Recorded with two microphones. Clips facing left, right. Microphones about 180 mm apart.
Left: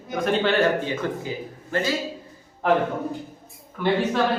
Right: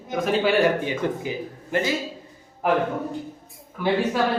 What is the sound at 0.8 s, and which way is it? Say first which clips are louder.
A man's voice: right 1 dB; 15° right (ahead or behind).